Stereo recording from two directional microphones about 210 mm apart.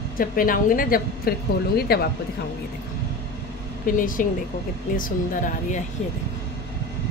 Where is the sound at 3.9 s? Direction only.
40° left (ahead or behind).